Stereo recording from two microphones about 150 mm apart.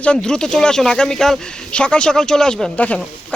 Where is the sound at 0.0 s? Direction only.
5° left (ahead or behind).